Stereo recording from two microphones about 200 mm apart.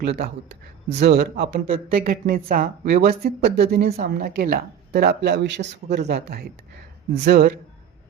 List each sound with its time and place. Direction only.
0.0 s speech: 55° right (ahead or behind)